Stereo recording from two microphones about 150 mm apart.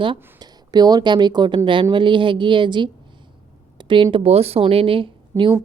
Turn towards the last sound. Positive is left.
turn(degrees=-35)  # may be behind; listen again after turning